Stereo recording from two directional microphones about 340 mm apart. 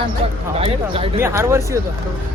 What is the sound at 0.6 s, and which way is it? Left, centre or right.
Speech, centre.